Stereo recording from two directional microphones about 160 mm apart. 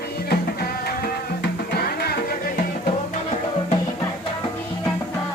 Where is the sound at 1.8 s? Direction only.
75° left (ahead or behind).